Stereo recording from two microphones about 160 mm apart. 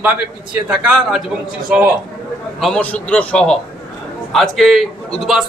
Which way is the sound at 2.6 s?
5° left (ahead or behind).